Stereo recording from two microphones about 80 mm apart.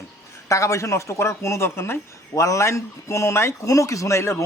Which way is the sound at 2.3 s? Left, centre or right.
Left.